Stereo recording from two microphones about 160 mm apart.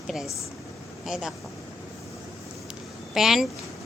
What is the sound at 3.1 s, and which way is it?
Speech, centre (ahead or behind).